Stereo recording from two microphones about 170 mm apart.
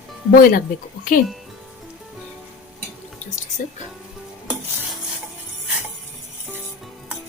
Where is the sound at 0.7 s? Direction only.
55° left (ahead or behind).